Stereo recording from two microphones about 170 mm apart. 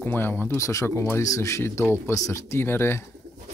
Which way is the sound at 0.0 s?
10° left (ahead or behind).